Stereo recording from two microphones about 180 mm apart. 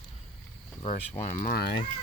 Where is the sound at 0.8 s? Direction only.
35° left (ahead or behind).